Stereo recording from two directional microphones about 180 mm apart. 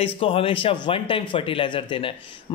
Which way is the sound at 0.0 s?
30° left (ahead or behind).